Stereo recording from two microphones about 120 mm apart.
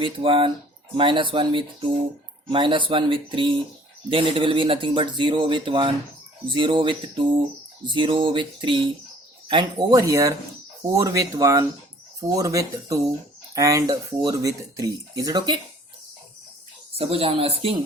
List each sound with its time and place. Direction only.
0.0 s speech: 45° right (ahead or behind)
9.9 s speech: 25° right (ahead or behind)
17.0 s speech: 55° right (ahead or behind)